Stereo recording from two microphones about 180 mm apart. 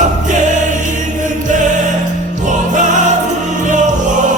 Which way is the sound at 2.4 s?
45° right (ahead or behind).